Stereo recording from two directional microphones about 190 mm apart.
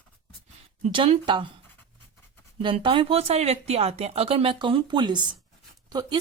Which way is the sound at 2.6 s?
25° right (ahead or behind).